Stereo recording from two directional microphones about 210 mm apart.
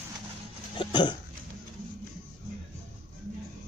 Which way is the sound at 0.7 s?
20° left (ahead or behind).